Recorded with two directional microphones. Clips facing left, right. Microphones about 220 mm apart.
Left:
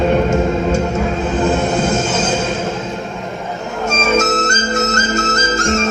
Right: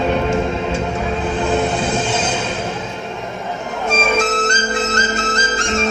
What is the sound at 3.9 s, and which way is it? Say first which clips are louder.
Music: left 2 dB; 45° left (ahead or behind).